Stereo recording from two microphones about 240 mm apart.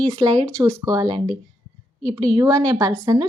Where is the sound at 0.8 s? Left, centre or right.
Centre.